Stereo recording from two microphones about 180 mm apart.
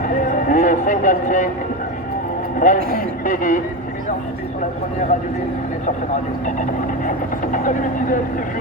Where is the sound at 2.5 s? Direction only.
45° left (ahead or behind).